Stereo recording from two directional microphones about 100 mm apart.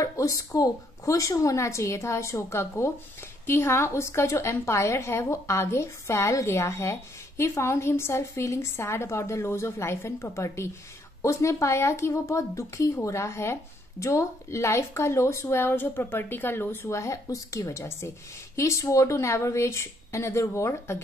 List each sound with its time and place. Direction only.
0.0 s a woman's voice: 35° left (ahead or behind)